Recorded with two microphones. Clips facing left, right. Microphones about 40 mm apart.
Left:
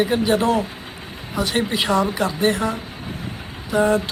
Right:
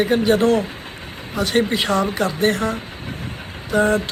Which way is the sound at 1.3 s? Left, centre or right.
Centre.